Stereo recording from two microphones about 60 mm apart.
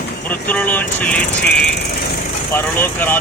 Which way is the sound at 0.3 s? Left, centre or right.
Left.